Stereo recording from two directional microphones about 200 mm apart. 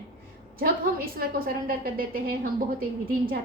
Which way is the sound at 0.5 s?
50° right (ahead or behind).